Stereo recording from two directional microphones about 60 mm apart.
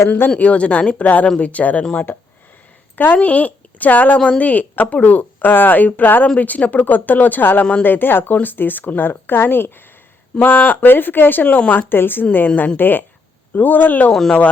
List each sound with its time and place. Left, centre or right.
0.3 s speech: left
14.1 s speech: centre